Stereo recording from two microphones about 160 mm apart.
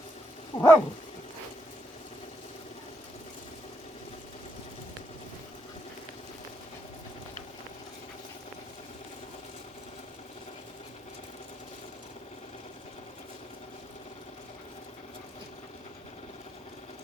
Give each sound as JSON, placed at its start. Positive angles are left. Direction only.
{"t": 0.5, "sound": "dog", "side_deg": 25}